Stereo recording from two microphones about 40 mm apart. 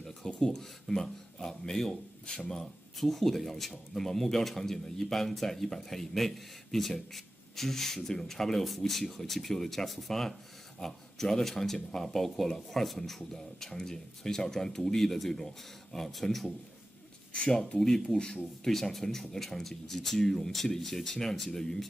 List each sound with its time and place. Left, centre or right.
0.4 s speech: centre
17.3 s speech: left
17.7 s speech: centre